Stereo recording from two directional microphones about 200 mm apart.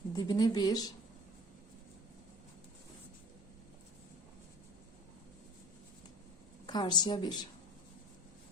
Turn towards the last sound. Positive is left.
turn(degrees=20)  # may be behind; listen again after turning